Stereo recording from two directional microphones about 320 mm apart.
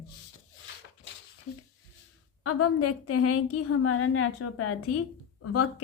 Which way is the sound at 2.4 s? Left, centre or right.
Left.